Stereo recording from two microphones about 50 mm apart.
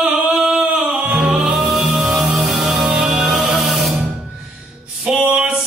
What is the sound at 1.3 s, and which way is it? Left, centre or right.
Music, centre.